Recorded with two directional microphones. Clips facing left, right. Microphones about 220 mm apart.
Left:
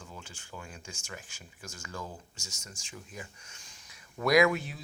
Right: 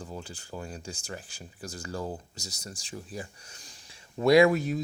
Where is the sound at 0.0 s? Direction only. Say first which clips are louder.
Right 8 dB; 35° right (ahead or behind).